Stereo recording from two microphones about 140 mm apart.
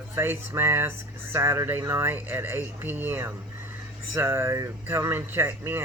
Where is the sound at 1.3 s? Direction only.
20° right (ahead or behind).